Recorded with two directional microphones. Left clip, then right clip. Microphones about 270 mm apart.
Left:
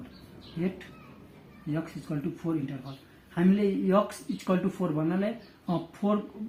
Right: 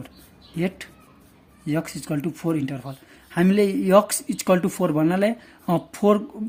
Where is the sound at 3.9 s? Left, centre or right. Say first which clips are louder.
Right 12 dB; right.